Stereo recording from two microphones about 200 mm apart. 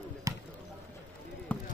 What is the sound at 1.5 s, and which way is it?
Basketball bounce, 5° left (ahead or behind).